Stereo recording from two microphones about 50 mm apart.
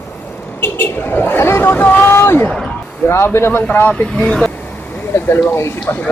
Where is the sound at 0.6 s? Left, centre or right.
Left.